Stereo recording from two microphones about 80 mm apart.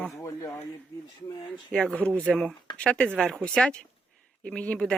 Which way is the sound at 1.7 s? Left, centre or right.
Centre.